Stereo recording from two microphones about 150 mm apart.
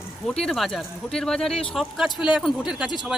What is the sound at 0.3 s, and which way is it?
Speech, centre (ahead or behind).